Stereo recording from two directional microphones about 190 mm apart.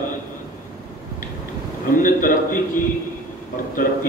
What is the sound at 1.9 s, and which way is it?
Speech, 45° left (ahead or behind).